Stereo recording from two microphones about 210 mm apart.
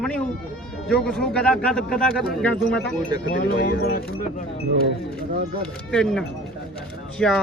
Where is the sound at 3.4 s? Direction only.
50° left (ahead or behind).